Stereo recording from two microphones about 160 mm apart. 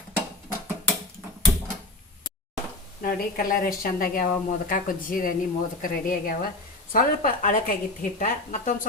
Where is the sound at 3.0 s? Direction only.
65° left (ahead or behind).